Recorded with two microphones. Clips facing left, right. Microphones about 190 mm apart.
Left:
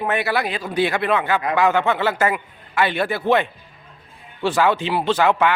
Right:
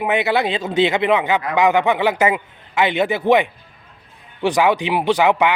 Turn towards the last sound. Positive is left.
turn(degrees=-15)  # may be behind; listen again after turning